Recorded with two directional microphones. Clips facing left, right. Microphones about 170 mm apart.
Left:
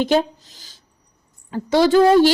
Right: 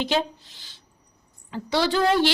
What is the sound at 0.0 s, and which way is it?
A woman's voice, 45° left (ahead or behind).